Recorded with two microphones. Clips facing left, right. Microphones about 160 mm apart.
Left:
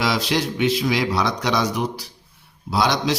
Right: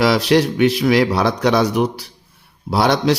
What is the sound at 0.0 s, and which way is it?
A man's voice, 60° right (ahead or behind).